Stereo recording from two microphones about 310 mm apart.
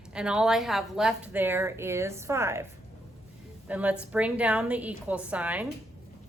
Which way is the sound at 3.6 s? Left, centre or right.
Centre.